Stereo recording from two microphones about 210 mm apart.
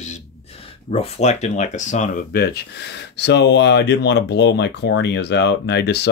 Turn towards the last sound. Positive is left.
turn(degrees=50)  # may be behind; listen again after turning